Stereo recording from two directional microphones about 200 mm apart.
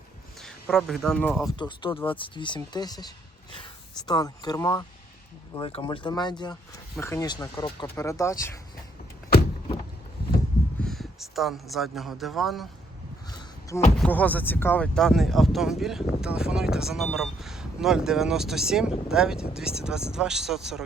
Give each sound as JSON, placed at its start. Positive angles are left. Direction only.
{"t": 0.3, "sound": "speech", "side_deg": 5}
{"t": 1.5, "sound": "speech", "side_deg": 20}
{"t": 5.5, "sound": "speech", "side_deg": 25}
{"t": 10.8, "sound": "speech", "side_deg": 0}
{"t": 13.3, "sound": "a sound", "side_deg": 15}
{"t": 14.0, "sound": "speech", "side_deg": 5}